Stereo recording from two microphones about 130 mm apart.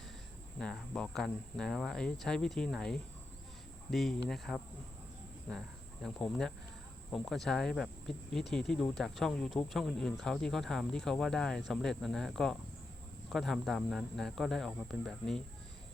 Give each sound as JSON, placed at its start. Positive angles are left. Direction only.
{"t": 0.6, "sound": "speech", "side_deg": 5}